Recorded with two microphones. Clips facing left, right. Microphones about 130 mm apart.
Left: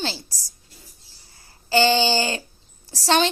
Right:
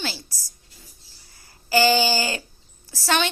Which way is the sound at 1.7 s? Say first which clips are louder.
Left 1 dB; 25° left (ahead or behind).